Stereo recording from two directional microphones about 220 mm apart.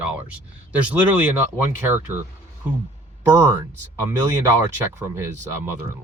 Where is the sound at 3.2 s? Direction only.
15° right (ahead or behind).